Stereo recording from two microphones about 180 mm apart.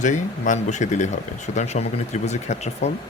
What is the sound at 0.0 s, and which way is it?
Speech, 45° left (ahead or behind).